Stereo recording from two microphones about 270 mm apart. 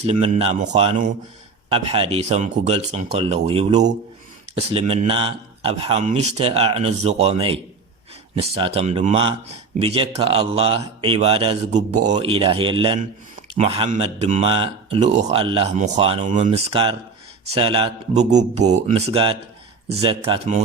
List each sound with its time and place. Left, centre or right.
0.0 s a man's voice: right